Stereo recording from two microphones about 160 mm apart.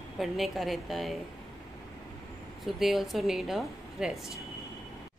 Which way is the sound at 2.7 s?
Centre (ahead or behind).